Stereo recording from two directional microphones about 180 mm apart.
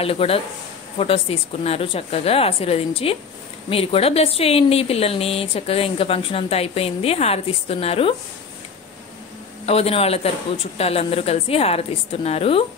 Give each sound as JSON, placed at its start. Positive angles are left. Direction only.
{"t": 0.0, "sound": "speech", "side_deg": 30}
{"t": 9.7, "sound": "speech", "side_deg": 35}